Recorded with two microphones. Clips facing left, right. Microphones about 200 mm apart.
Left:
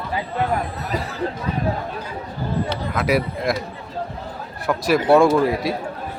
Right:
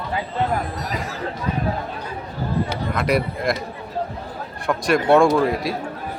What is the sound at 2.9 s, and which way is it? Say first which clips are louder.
Speech: left 1 dB; centre (ahead or behind).